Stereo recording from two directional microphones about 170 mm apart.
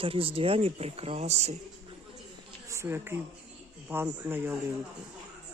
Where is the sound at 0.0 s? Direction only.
35° right (ahead or behind).